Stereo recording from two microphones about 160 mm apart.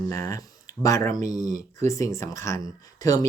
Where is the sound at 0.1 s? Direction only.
20° left (ahead or behind).